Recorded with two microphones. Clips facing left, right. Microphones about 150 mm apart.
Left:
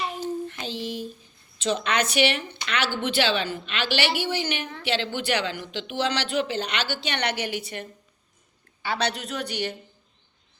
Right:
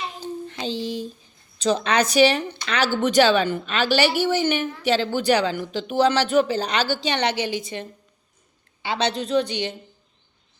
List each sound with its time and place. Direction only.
0.4 s a sound: 30° right (ahead or behind)
1.5 s a woman's voice: 35° right (ahead or behind)
8.8 s speech: 20° right (ahead or behind)